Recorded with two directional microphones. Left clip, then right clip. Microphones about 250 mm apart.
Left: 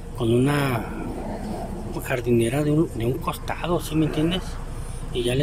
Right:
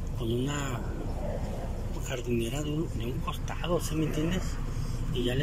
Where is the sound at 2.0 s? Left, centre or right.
Centre.